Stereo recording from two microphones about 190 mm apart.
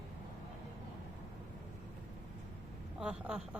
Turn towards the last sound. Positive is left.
turn(degrees=-5)  # may be behind; listen again after turning